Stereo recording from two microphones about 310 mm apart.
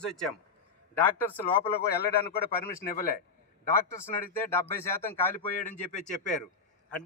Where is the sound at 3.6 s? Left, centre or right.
Centre.